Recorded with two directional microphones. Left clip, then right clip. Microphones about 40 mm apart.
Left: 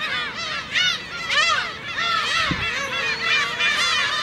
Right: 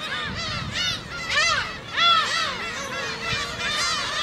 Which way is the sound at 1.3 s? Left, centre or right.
Left.